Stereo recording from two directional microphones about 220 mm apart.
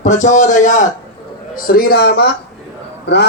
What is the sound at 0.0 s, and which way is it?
A man's voice, 35° left (ahead or behind).